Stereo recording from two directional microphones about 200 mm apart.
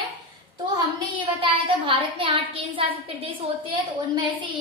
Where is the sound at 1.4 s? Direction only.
25° right (ahead or behind).